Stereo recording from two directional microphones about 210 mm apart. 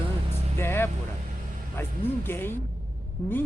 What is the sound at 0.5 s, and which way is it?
Speech, 10° left (ahead or behind).